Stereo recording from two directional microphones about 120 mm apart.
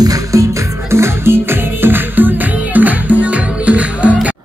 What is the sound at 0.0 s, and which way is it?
Music, 30° right (ahead or behind).